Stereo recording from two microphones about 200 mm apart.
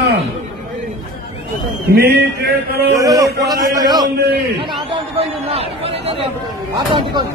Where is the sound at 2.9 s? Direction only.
15° right (ahead or behind).